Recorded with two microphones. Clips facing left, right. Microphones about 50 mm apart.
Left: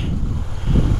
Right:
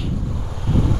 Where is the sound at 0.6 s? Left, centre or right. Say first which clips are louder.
Even; left.